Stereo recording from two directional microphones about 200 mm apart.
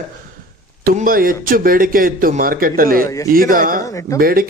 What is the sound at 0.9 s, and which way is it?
Speech, 45° right (ahead or behind).